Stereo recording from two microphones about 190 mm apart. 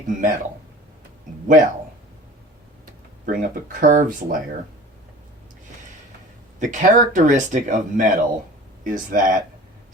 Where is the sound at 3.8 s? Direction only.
45° right (ahead or behind).